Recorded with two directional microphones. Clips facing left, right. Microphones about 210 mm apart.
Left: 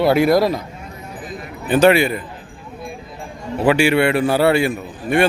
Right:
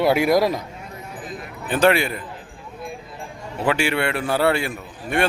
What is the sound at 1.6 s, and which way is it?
Speech, 5° left (ahead or behind).